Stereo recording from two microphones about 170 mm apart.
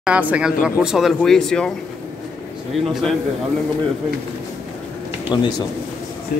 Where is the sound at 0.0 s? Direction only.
10° right (ahead or behind).